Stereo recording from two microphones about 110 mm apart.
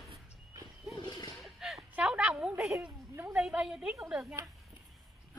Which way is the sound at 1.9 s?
10° right (ahead or behind).